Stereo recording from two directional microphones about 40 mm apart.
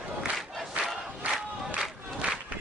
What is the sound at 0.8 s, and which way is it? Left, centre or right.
Crowd, right.